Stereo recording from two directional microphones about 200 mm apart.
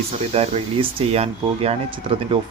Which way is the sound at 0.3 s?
30° right (ahead or behind).